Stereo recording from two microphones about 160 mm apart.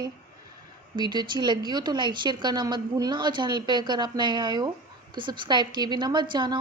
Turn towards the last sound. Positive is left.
turn(degrees=-30)  # may be behind; listen again after turning